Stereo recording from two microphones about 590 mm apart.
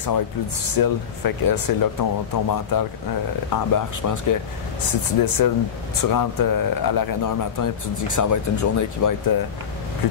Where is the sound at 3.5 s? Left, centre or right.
Left.